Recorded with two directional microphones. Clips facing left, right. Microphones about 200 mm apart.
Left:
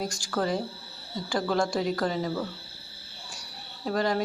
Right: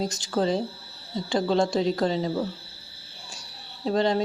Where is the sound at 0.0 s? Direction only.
20° right (ahead or behind).